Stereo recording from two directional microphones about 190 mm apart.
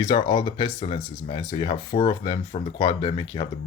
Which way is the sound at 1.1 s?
20° left (ahead or behind).